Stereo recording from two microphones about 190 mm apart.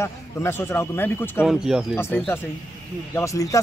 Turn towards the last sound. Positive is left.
turn(degrees=15)  # may be behind; listen again after turning